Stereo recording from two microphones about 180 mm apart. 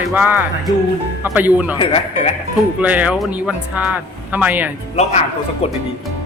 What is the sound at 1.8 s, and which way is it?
Speech, 35° left (ahead or behind).